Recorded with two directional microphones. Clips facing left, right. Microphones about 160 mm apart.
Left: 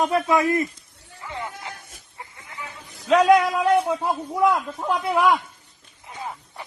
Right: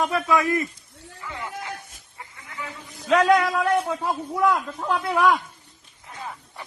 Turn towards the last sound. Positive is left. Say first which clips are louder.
# left 1 dB
turn(degrees=15)  # may be behind; listen again after turning